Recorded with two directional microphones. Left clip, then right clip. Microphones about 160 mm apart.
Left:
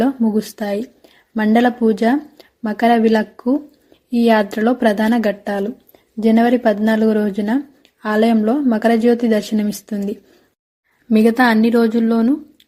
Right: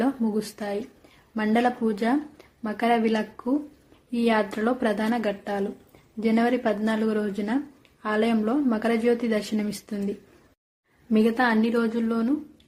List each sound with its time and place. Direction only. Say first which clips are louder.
0.0 s speech: left 8 dB; 30° left (ahead or behind)
11.1 s speech: left 8 dB; 40° left (ahead or behind)